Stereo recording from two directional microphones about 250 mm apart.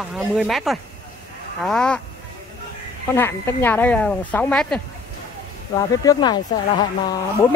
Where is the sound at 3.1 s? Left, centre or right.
Centre.